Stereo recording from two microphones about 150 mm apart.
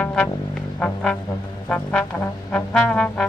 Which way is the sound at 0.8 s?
5° left (ahead or behind).